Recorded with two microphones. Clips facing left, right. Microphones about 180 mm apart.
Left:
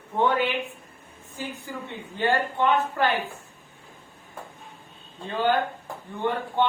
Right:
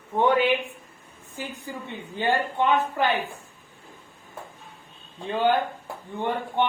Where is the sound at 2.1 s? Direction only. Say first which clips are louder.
Even; 15° right (ahead or behind).